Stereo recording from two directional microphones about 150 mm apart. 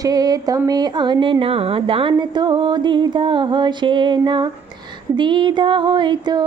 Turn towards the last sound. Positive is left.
turn(degrees=-30)  # may be behind; listen again after turning